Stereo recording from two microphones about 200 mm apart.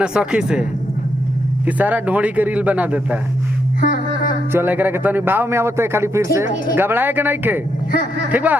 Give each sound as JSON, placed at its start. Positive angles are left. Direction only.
{"t": 0.0, "sound": "speech", "side_deg": -5}
{"t": 3.8, "sound": "a sound", "side_deg": 45}
{"t": 4.5, "sound": "speech", "side_deg": -10}